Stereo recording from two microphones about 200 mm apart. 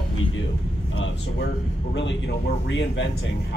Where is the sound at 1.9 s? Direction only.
65° left (ahead or behind).